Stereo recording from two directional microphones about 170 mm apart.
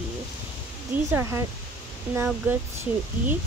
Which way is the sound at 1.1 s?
15° right (ahead or behind).